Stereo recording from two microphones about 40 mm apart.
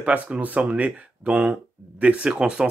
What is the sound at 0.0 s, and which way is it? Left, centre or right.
Speech, right.